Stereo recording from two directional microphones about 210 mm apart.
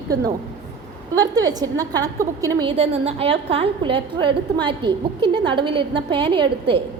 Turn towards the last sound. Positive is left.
turn(degrees=-25)  # may be behind; listen again after turning